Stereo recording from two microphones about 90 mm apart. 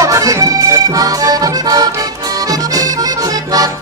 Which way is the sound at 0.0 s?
40° right (ahead or behind).